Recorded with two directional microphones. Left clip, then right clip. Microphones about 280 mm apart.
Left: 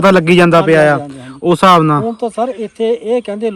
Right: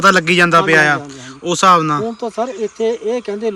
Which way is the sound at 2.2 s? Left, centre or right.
Centre.